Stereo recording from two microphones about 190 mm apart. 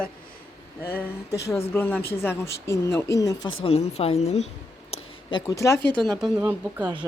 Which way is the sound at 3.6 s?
30° left (ahead or behind).